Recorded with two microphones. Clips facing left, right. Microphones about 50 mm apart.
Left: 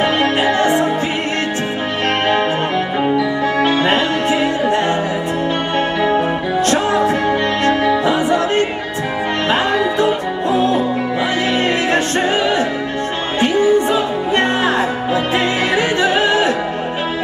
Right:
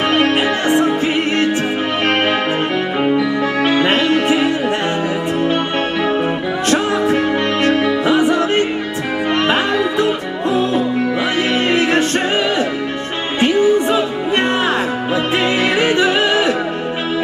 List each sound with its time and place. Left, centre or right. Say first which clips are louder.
4.1 s music: right 2 dB; right
8.0 s music: right 2 dB; right
13.4 s music: even; right
16.0 s music: even; left